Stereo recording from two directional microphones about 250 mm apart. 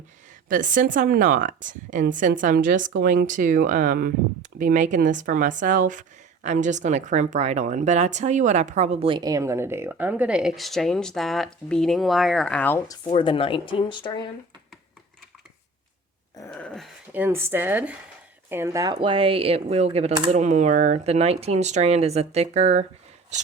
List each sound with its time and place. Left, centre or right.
0.4 s a woman's voice: right; by 13.0 s centre
13.1 s speech: left
16.5 s a woman's voice: centre; by 22.9 s right